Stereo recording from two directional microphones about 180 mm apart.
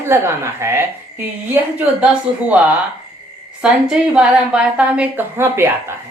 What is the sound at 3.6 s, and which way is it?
Speech, 5° right (ahead or behind).